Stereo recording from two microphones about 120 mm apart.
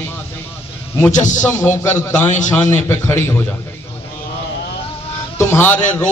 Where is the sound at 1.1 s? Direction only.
90° left.